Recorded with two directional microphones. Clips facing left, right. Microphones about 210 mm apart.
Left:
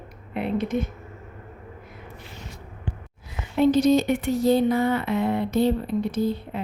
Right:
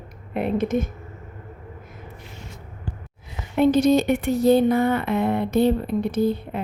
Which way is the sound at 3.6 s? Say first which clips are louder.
Right 1 dB; 55° right (ahead or behind).